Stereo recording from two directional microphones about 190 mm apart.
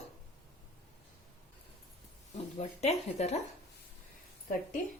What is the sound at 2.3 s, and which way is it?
Speech, 35° left (ahead or behind).